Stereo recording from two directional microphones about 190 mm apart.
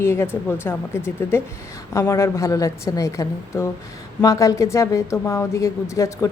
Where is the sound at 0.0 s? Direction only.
15° left (ahead or behind).